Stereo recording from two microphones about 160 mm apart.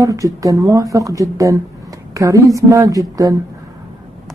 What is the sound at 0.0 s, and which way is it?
Speech, 20° right (ahead or behind).